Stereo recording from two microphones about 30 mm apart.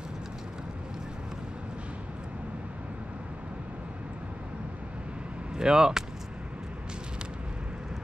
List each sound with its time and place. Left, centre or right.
5.6 s speech: right